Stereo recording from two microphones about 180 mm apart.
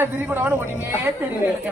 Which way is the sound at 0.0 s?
10° right (ahead or behind).